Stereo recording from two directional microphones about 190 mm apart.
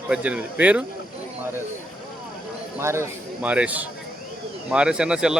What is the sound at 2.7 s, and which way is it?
Speech, 15° right (ahead or behind).